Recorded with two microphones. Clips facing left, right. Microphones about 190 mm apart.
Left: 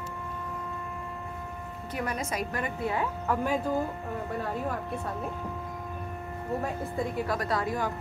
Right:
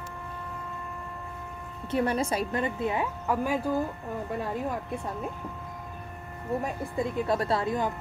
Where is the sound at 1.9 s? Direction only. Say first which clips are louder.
Right 6 dB; 30° right (ahead or behind).